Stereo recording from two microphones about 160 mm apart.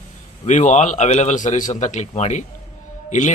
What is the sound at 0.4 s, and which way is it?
A man's voice, 50° left (ahead or behind).